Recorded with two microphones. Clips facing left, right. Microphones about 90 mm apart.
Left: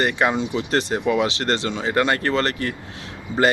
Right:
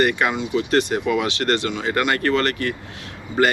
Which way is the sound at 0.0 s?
25° left (ahead or behind).